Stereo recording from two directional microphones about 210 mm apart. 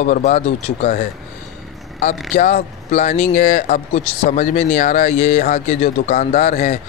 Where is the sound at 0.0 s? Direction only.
40° left (ahead or behind).